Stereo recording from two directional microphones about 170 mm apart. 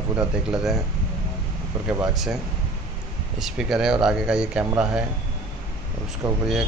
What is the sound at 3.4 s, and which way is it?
Speech, centre (ahead or behind).